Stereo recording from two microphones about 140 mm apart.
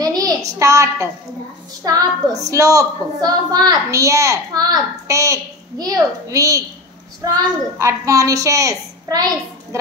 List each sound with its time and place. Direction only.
0.0 s a woman's voice: 25° right (ahead or behind)
7.8 s a woman's voice: 25° right (ahead or behind)